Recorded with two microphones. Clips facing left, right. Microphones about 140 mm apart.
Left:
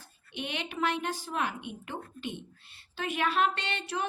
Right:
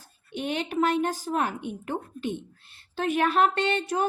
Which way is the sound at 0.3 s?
45° right (ahead or behind).